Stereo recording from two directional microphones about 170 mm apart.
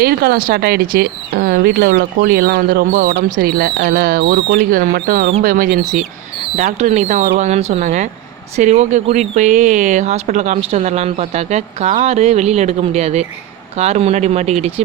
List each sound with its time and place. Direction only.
0.0 s speech: 65° right (ahead or behind)
3.3 s speech: 60° right (ahead or behind)
4.9 s speech: 60° right (ahead or behind)
6.6 s speech: 45° right (ahead or behind)